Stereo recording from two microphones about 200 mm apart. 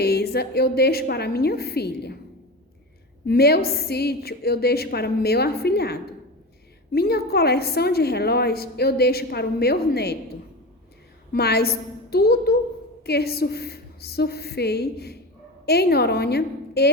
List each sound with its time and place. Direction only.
0.0 s a woman's voice: 55° left (ahead or behind)
3.2 s a woman's voice: 50° left (ahead or behind)
11.3 s a woman's voice: 55° left (ahead or behind)